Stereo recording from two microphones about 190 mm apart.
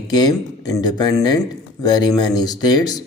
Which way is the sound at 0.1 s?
20° left (ahead or behind).